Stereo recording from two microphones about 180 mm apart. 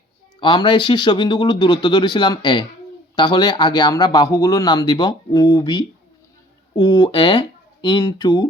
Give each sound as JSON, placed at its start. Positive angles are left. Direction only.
{"t": 0.3, "sound": "speech", "side_deg": 25}